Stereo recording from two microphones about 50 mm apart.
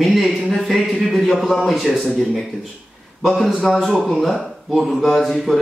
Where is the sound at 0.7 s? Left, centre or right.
Centre.